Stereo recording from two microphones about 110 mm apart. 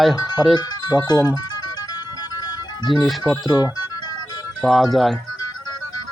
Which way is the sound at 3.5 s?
35° left (ahead or behind).